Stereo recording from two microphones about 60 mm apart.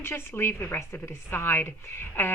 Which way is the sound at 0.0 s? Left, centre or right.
Left.